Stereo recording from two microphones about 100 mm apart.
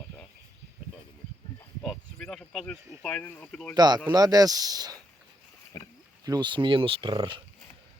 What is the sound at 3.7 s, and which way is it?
Speech, 45° right (ahead or behind).